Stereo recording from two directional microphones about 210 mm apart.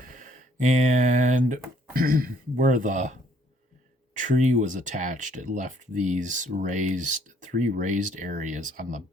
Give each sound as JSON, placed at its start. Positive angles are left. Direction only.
{"t": 0.0, "sound": "speech", "side_deg": -40}
{"t": 4.2, "sound": "speech", "side_deg": -35}